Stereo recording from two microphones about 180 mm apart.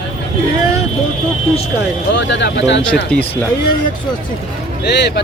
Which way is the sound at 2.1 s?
75° left (ahead or behind).